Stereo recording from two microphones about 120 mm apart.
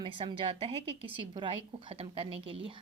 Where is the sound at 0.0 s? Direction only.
45° right (ahead or behind).